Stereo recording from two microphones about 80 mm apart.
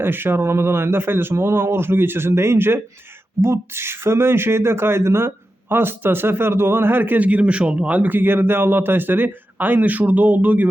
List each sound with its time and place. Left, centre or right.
0.0 s speech: right